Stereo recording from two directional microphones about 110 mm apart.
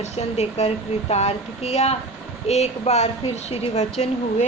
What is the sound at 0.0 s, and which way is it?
A woman's voice, 75° left (ahead or behind).